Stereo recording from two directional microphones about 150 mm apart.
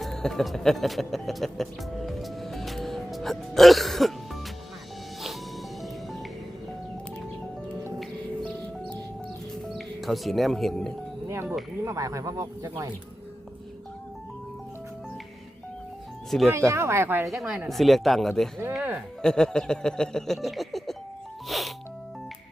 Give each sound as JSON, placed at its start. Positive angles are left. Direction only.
{"t": 0.0, "sound": "speech", "side_deg": 5}
{"t": 9.6, "sound": "speech", "side_deg": 0}
{"t": 11.9, "sound": "speech", "side_deg": -20}
{"t": 16.5, "sound": "speech", "side_deg": -15}
{"t": 17.2, "sound": "a sound", "side_deg": -5}
{"t": 18.7, "sound": "speech", "side_deg": -5}
{"t": 19.2, "sound": "a sound", "side_deg": 5}
{"t": 21.5, "sound": "music", "side_deg": 0}